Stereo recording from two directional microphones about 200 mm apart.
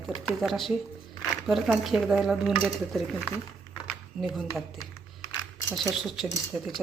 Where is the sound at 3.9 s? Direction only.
Centre (ahead or behind).